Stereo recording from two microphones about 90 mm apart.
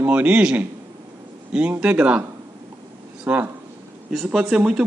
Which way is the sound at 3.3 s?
15° right (ahead or behind).